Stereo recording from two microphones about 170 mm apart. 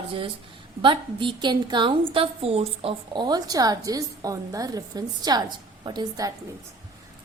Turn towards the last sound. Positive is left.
turn(degrees=-25)  # may be behind; listen again after turning